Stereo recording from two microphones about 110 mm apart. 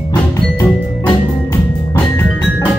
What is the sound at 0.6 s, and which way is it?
Music, 20° left (ahead or behind).